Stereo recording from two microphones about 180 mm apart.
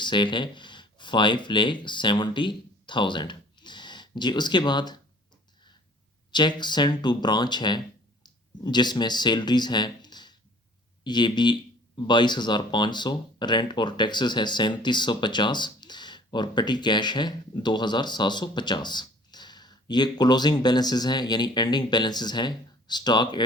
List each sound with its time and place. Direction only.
0.0 s speech: 25° left (ahead or behind)
6.3 s speech: 25° left (ahead or behind)